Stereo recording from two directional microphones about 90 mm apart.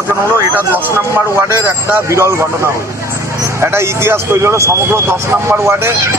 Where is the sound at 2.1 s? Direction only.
30° right (ahead or behind).